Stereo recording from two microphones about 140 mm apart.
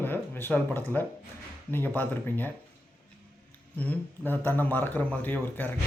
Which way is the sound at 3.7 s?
10° left (ahead or behind).